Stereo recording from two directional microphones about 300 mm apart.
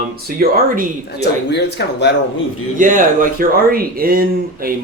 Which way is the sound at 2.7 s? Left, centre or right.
Right.